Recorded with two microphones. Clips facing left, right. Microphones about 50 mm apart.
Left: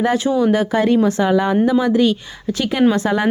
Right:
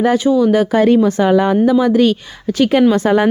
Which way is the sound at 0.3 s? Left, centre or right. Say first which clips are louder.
Right 4 dB; left.